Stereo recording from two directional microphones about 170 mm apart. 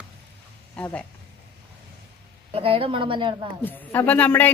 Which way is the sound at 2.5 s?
35° right (ahead or behind).